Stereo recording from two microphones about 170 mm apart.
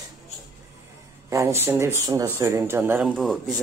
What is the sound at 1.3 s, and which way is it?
Speech, 15° right (ahead or behind).